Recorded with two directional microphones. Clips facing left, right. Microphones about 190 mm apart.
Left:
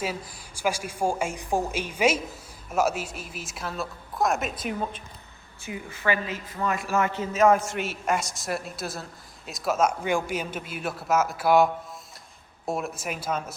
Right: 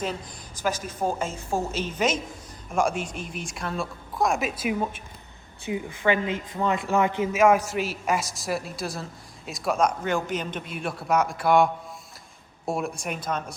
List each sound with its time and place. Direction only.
0.0 s a woman's voice: 10° left (ahead or behind)
5.6 s speech: 20° right (ahead or behind)
7.4 s speech: centre (ahead or behind)